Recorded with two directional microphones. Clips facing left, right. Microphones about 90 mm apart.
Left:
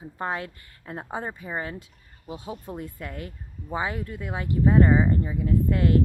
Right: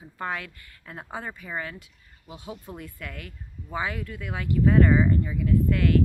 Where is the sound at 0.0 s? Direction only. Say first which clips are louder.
Left 2 dB; 30° left (ahead or behind).